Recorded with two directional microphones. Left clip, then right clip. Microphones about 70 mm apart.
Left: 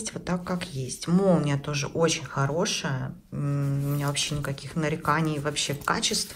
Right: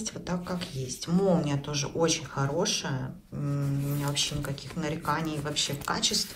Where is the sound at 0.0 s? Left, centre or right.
Right.